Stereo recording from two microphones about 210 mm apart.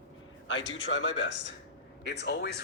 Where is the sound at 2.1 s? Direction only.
50° left (ahead or behind).